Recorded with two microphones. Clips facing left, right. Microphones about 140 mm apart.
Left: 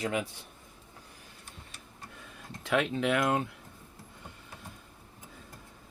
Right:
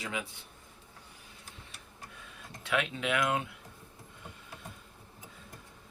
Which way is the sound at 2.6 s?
40° left (ahead or behind).